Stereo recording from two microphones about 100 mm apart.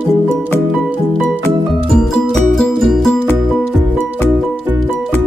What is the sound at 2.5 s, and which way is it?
Music, centre (ahead or behind).